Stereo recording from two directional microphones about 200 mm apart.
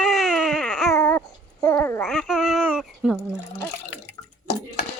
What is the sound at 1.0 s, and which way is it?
Dog, 10° left (ahead or behind).